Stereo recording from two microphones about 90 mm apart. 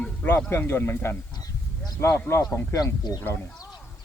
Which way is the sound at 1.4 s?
45° left (ahead or behind).